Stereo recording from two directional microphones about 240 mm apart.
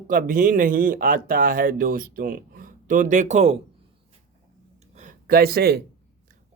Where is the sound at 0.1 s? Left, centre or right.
Right.